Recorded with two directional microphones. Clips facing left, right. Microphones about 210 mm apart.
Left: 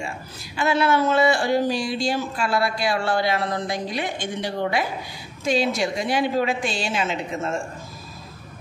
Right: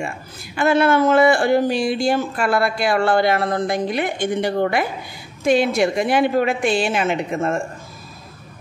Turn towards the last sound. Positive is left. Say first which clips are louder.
# right 5 dB
turn(degrees=-55)  # may be behind; listen again after turning